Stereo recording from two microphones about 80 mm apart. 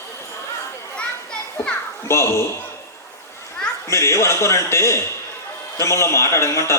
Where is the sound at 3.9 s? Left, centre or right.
Left.